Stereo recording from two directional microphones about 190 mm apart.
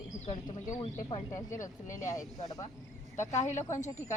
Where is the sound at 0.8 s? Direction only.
25° left (ahead or behind).